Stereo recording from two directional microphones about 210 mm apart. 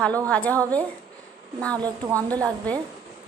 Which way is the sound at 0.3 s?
5° left (ahead or behind).